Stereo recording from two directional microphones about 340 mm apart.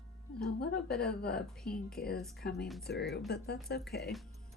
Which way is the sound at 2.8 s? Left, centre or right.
Left.